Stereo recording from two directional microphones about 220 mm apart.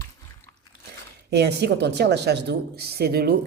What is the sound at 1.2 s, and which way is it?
A woman's voice, 50° right (ahead or behind).